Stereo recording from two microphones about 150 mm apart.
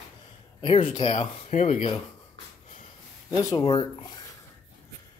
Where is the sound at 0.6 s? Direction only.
35° left (ahead or behind).